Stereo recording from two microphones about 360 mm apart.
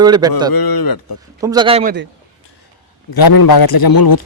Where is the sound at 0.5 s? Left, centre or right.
Left.